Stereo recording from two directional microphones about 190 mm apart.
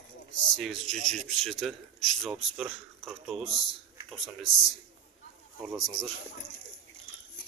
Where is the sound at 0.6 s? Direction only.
5° left (ahead or behind).